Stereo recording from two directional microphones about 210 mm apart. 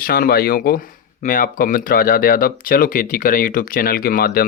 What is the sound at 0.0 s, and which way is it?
Speech, 45° left (ahead or behind).